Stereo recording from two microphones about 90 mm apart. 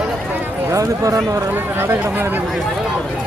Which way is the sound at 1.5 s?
25° right (ahead or behind).